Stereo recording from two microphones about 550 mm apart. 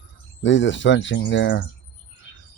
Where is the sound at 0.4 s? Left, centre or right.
Centre.